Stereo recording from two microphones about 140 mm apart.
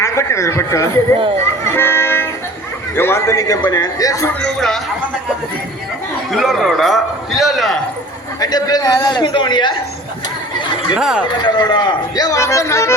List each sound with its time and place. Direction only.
0.0 s speech: 20° left (ahead or behind)
1.6 s vehicle: 15° left (ahead or behind)
2.9 s speech: 15° left (ahead or behind)
4.4 s a man's voice: 5° left (ahead or behind)
6.3 s a man's voice: centre (ahead or behind)
8.4 s a man's voice: 25° left (ahead or behind)
10.9 s a man's voice: 5° right (ahead or behind)
11.4 s speech: 30° left (ahead or behind)